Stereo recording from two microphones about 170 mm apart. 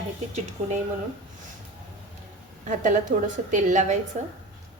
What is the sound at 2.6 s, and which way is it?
A woman's voice, 50° right (ahead or behind).